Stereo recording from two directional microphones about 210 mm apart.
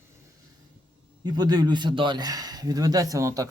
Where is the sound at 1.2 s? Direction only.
20° right (ahead or behind).